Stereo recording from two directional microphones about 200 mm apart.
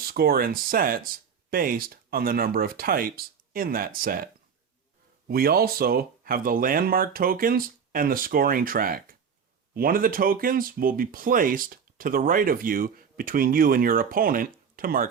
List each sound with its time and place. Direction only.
0.0 s speech: 50° right (ahead or behind)
5.3 s speech: 50° right (ahead or behind)